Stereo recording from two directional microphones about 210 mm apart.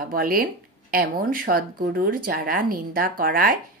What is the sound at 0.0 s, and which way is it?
Speech, 45° right (ahead or behind).